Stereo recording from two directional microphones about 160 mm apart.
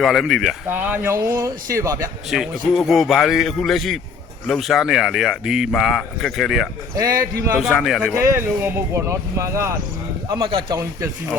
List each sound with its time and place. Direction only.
0.0 s speech: centre (ahead or behind)
0.7 s speech: 10° right (ahead or behind)
2.3 s speech: centre (ahead or behind)
6.9 s speech: 20° right (ahead or behind)
7.6 s speech: centre (ahead or behind); by 11.1 s 25° right (ahead or behind)